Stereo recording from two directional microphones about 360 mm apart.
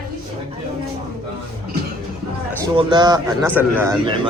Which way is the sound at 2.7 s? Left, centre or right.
Centre.